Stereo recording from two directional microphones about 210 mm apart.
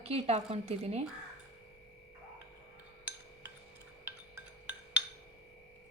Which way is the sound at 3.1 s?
5° right (ahead or behind).